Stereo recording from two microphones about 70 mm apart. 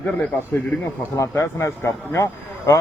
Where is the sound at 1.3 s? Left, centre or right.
Left.